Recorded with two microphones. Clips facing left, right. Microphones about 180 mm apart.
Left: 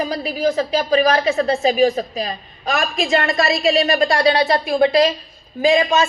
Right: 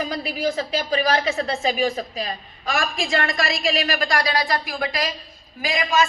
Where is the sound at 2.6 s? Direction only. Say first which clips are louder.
Left 4 dB; 20° left (ahead or behind).